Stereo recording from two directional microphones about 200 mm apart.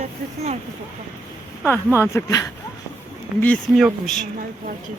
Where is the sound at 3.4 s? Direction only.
5° left (ahead or behind).